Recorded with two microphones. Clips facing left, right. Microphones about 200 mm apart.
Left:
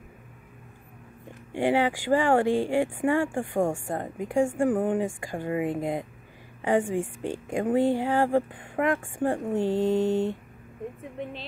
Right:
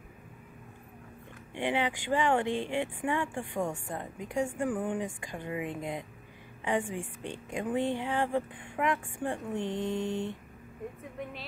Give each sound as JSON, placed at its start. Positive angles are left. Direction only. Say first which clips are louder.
{"t": 1.5, "sound": "speech", "louder": "left 7 dB", "side_deg": 40}